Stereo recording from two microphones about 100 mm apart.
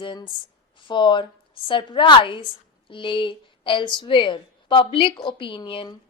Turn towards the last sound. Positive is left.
turn(degrees=60)  # may be behind; listen again after turning